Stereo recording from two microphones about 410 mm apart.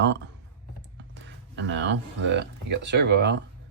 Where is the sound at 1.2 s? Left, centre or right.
Right.